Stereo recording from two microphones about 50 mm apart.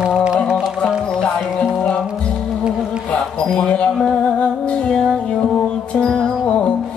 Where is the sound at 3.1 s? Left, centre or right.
Left.